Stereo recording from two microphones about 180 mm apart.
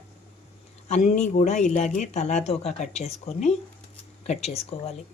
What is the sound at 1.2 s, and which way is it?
Speech, 40° left (ahead or behind).